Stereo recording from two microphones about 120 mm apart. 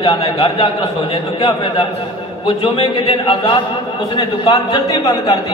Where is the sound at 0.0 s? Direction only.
50° left (ahead or behind).